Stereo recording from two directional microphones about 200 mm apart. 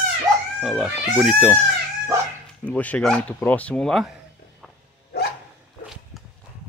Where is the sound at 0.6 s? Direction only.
5° right (ahead or behind).